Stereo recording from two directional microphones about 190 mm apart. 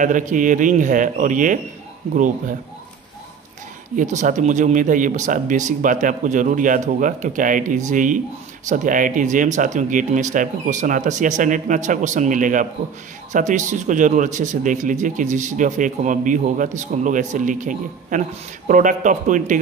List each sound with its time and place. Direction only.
0.0 s speech: 45° right (ahead or behind)
3.9 s speech: 40° right (ahead or behind)